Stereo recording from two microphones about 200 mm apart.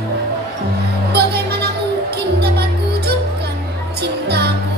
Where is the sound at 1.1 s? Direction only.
55° right (ahead or behind).